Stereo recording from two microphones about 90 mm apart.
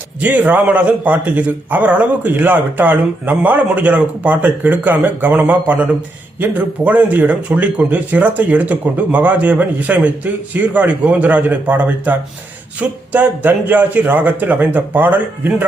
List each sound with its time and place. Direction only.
0.2 s a man's voice: 15° right (ahead or behind)